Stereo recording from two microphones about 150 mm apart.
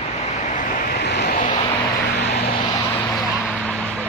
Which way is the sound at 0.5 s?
60° left (ahead or behind).